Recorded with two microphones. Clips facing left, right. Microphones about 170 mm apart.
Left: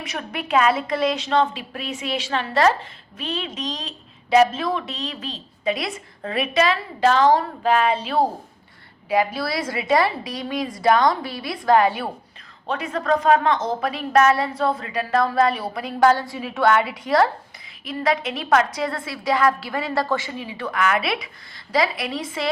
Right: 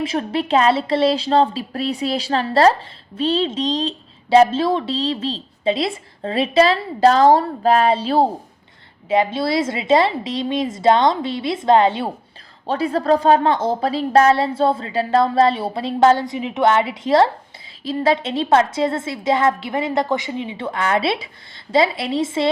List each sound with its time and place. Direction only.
0.0 s a woman's voice: 30° right (ahead or behind)